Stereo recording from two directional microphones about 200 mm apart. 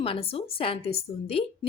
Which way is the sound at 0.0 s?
30° left (ahead or behind).